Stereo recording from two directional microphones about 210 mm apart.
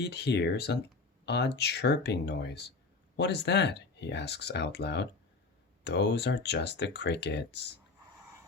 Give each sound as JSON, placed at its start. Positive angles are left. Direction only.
{"t": 0.0, "sound": "speech", "side_deg": 50}